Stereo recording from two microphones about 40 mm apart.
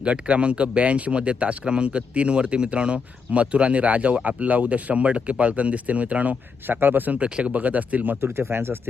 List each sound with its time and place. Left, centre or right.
0.0 s speech: right
6.7 s speech: right
7.2 s speech: right
8.2 s speech: right